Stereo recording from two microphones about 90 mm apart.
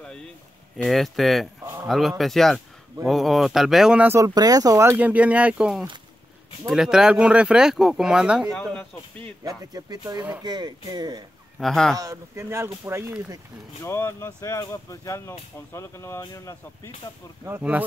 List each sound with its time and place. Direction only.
0.0 s a sound: 10° left (ahead or behind)
0.8 s speech: centre (ahead or behind)
4.2 s speech: 45° right (ahead or behind)
4.9 s speech: 15° right (ahead or behind)
8.5 s speech: 15° left (ahead or behind)
9.4 s speech: 45° right (ahead or behind)
11.6 s speech: 5° left (ahead or behind)
12.0 s speech: 35° right (ahead or behind)
13.8 s speech: 30° left (ahead or behind)
17.6 s speech: 15° right (ahead or behind)